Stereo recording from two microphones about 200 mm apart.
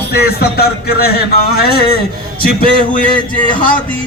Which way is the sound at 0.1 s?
50° left (ahead or behind).